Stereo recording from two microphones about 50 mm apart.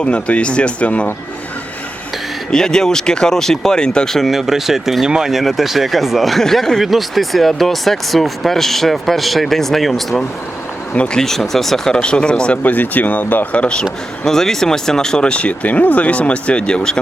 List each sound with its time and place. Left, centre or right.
0.0 s speech: left
2.5 s speech: centre
10.9 s speech: left
11.2 s speech: centre
12.6 s speech: left
14.3 s speech: centre